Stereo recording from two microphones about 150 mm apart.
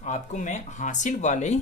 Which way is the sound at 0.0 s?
55° left (ahead or behind).